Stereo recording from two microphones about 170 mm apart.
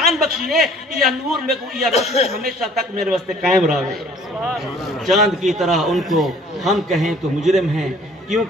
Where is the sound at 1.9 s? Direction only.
40° left (ahead or behind).